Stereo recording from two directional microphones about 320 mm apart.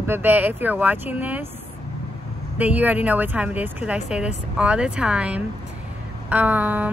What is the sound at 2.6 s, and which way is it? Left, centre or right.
Speech, centre.